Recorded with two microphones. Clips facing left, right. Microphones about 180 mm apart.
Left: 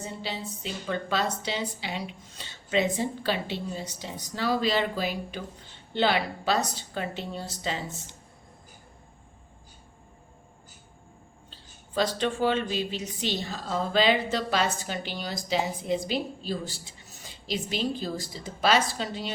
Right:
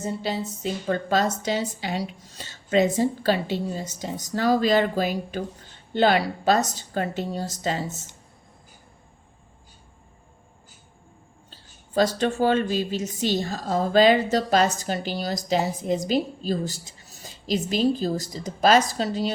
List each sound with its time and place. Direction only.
0.0 s a woman's voice: 45° right (ahead or behind)
11.5 s a woman's voice: 45° right (ahead or behind)